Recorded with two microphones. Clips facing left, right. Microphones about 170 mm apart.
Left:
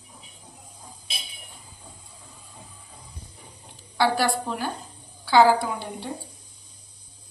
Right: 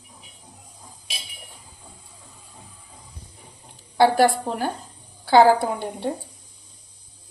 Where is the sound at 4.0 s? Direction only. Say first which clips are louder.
Right 6 dB; 50° right (ahead or behind).